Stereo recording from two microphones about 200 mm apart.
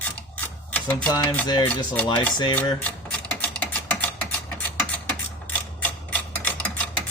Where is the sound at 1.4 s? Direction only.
20° left (ahead or behind).